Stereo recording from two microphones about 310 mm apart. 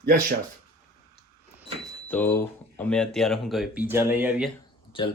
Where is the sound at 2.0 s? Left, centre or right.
Centre.